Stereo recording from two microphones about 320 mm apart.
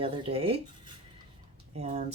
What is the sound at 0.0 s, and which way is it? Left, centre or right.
Speech, centre.